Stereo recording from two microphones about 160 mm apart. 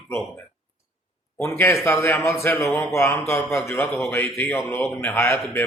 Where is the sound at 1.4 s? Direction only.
15° left (ahead or behind).